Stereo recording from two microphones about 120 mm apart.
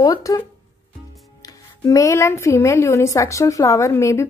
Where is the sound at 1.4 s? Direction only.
25° left (ahead or behind).